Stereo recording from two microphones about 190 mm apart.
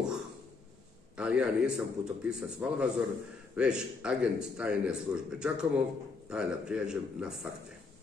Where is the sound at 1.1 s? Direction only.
5° right (ahead or behind).